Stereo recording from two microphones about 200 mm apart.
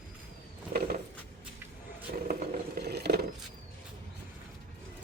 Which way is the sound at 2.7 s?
55° right (ahead or behind).